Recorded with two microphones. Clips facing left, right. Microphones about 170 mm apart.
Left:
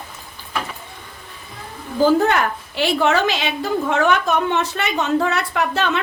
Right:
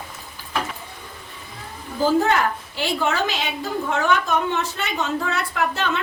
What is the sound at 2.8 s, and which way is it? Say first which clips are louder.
A woman's voice: left 5 dB; 75° left (ahead or behind).